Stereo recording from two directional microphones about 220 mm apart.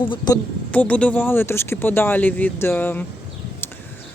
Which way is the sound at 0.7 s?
5° left (ahead or behind).